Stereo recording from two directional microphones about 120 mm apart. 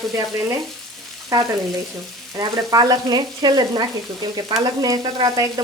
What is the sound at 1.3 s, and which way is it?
Frying, 30° right (ahead or behind).